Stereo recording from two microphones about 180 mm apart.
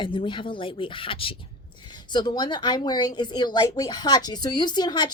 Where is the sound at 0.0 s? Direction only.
25° left (ahead or behind).